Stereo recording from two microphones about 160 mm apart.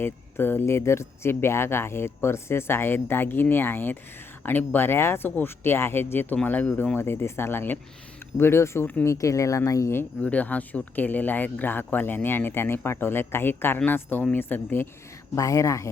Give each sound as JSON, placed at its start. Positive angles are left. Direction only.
{"t": 0.0, "sound": "speech", "side_deg": 15}